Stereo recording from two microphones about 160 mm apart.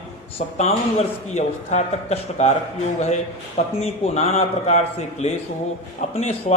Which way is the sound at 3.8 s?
40° left (ahead or behind).